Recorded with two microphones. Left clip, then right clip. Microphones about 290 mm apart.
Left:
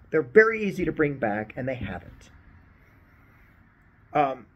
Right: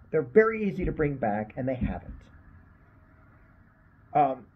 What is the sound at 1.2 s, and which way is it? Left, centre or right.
Speech, centre.